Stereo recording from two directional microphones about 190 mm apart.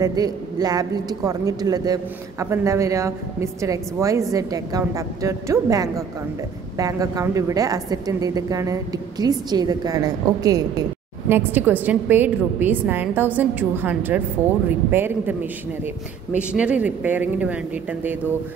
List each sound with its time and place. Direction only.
0.0 s a woman's voice: 20° right (ahead or behind)